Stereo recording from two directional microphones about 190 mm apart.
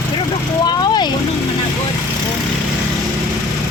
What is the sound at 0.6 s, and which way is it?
Vehicle, 20° left (ahead or behind).